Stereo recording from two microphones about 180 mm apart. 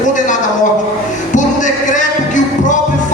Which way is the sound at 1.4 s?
45° left (ahead or behind).